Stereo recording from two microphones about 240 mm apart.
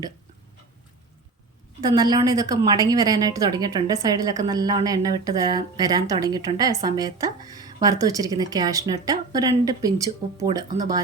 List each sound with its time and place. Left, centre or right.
1.8 s a woman's voice: centre